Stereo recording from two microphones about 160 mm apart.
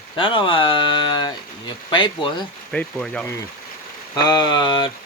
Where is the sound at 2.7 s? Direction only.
5° left (ahead or behind).